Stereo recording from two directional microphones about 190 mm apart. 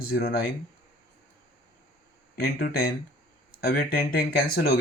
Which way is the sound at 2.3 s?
50° left (ahead or behind).